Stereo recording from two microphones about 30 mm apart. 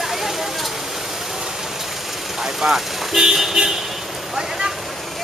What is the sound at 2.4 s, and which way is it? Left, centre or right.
Vehicle, centre.